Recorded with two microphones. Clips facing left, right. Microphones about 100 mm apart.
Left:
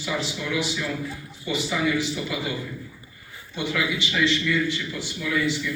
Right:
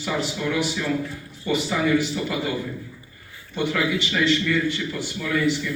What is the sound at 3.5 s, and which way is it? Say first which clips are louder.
A man's voice: right 3 dB; 50° right (ahead or behind).